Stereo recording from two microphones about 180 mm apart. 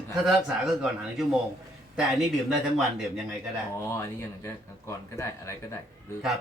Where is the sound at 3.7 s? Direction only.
15° left (ahead or behind).